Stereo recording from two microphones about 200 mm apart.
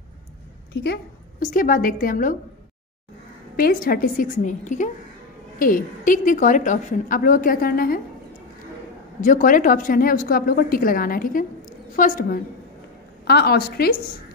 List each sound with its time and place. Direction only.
1.4 s a woman's voice: 45° left (ahead or behind)
3.5 s a woman's voice: 45° left (ahead or behind)
9.2 s a woman's voice: 40° left (ahead or behind)
13.3 s a woman's voice: 55° left (ahead or behind)